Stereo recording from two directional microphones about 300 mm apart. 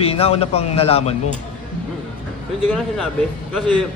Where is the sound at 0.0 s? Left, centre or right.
Centre.